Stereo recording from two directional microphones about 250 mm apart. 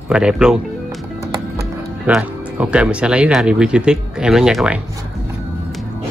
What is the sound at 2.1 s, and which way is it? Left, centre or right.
Speech, centre.